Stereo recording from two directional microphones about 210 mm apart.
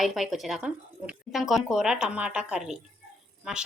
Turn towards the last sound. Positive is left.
turn(degrees=-5)  # may be behind; listen again after turning